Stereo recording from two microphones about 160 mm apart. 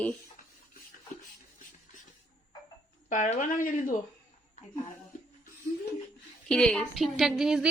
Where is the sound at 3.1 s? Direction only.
50° left (ahead or behind).